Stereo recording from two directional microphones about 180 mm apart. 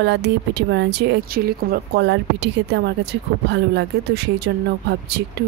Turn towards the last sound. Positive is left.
turn(degrees=-65)  # may be behind; listen again after turning